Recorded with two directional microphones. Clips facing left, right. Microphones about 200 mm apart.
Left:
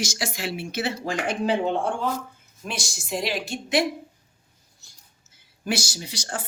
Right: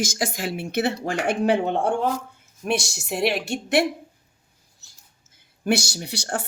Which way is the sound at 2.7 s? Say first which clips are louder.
Right 6 dB; 65° right (ahead or behind).